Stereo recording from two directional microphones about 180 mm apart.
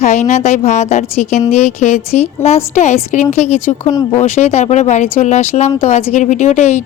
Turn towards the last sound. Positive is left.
turn(degrees=40)  # may be behind; listen again after turning